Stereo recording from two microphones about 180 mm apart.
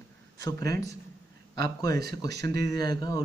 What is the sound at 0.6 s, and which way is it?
Speech, 65° right (ahead or behind).